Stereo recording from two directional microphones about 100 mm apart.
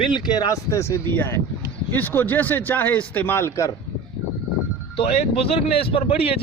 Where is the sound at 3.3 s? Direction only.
25° left (ahead or behind).